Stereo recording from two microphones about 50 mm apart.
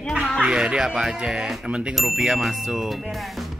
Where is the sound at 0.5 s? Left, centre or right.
Centre.